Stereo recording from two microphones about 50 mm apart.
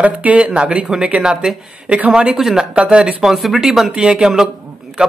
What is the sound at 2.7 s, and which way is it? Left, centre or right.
Speech, right.